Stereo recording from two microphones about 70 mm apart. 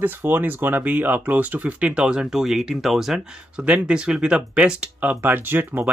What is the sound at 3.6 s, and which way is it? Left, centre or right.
Speech, centre.